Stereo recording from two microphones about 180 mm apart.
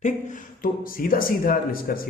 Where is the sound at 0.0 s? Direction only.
45° left (ahead or behind).